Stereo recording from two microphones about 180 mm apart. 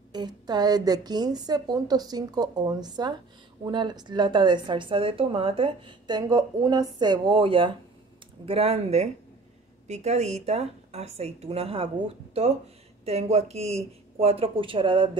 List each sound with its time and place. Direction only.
0.1 s a woman's voice: 25° right (ahead or behind)